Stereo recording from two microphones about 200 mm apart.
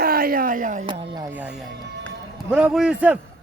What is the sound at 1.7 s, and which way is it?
Music, 60° right (ahead or behind).